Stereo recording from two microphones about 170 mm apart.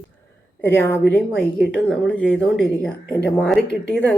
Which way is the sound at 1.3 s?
5° left (ahead or behind).